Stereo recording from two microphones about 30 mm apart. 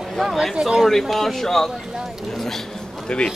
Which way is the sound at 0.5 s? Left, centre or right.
Centre.